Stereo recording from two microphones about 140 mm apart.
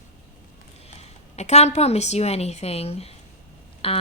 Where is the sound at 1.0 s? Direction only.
50° left (ahead or behind).